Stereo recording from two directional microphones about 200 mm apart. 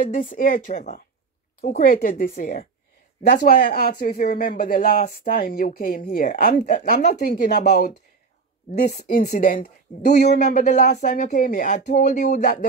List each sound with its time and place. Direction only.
0.0 s speech: 40° left (ahead or behind)
7.2 s speech: 50° left (ahead or behind)